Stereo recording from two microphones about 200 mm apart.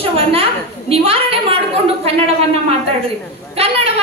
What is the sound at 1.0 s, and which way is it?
Speech, 30° right (ahead or behind).